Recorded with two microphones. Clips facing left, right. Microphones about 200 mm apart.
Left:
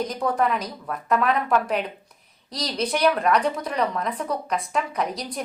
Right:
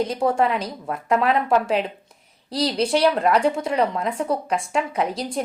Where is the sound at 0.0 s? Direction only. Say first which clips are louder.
Right 3 dB; 25° right (ahead or behind).